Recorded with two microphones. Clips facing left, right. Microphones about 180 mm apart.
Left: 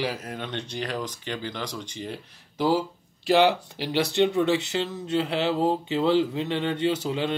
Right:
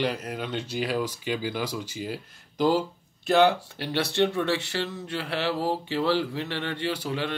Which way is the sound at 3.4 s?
15° left (ahead or behind).